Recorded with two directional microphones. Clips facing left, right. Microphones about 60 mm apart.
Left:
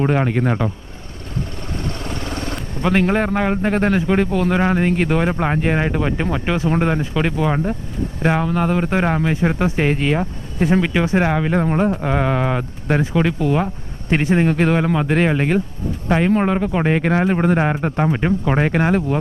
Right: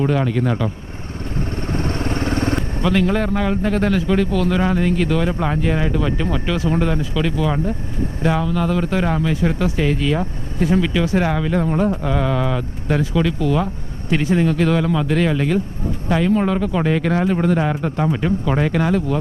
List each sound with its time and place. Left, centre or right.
0.0 s speech: left
1.6 s vehicle: right
2.8 s speech: left